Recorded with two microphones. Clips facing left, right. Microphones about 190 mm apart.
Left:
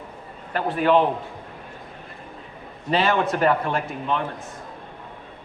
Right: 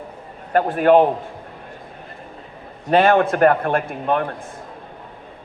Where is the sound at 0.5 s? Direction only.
50° right (ahead or behind).